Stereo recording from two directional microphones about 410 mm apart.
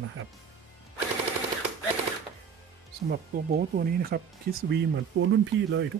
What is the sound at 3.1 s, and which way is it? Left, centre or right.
Speech, right.